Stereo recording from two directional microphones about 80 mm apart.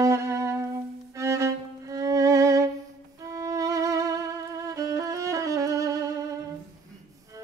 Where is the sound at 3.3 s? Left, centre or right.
Right.